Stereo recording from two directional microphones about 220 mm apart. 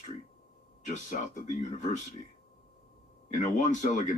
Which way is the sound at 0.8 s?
35° left (ahead or behind).